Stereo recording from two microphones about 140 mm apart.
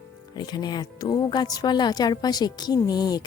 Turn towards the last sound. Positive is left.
turn(degrees=30)  # may be behind; listen again after turning